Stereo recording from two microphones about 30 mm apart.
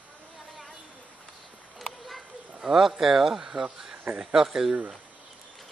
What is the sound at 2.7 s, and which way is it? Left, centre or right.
Speech, centre.